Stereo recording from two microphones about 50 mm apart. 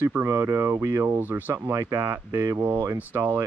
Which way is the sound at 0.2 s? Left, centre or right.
Right.